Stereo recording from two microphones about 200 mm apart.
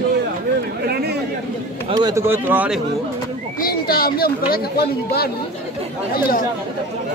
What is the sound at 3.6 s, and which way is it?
Speech, 45° left (ahead or behind).